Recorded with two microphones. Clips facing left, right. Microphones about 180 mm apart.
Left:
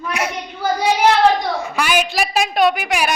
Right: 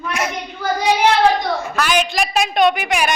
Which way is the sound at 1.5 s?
10° left (ahead or behind).